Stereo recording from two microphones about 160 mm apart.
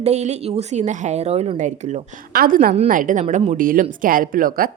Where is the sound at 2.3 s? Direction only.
65° right (ahead or behind).